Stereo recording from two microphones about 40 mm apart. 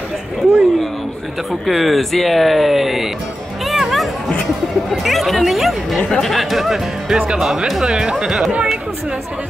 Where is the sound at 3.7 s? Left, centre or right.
Centre.